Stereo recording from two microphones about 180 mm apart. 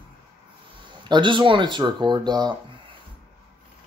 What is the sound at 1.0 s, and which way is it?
Speech, 25° right (ahead or behind).